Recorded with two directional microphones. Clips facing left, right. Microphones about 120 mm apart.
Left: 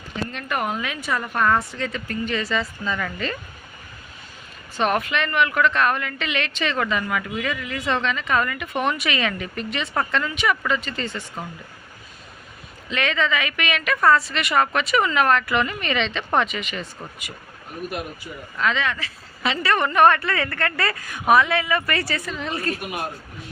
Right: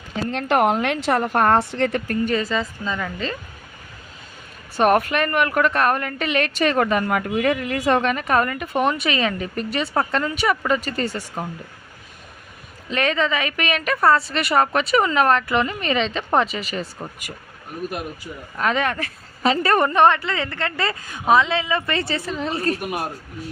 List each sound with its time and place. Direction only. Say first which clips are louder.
0.3 s a woman's voice: right 10 dB; 85° right; by 3.4 s 30° right (ahead or behind)
4.8 s a woman's voice: right 5 dB; 45° right (ahead or behind)
12.9 s speech: right 2 dB; 40° right (ahead or behind)
18.5 s speech: right 2 dB; 45° right (ahead or behind)
20.0 s a woman's voice: even; 20° right (ahead or behind); by 23.5 s 40° right (ahead or behind)